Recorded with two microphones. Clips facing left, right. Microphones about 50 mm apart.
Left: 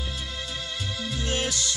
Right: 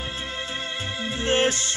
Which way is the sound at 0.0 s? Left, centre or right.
Right.